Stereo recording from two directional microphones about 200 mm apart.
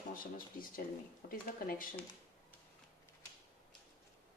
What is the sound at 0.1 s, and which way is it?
A woman's voice, 45° left (ahead or behind).